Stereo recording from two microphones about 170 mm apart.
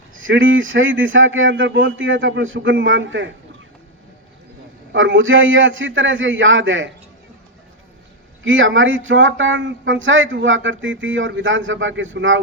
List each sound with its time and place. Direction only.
0.3 s speech: 90° right
4.9 s speech: 90° right
8.8 s speech: 90° right